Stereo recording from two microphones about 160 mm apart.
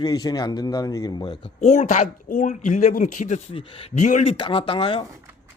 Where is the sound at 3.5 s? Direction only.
35° left (ahead or behind).